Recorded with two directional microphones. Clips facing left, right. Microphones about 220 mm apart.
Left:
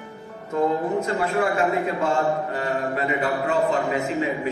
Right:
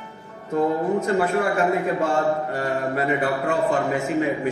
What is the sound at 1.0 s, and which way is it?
A man's voice, 45° right (ahead or behind).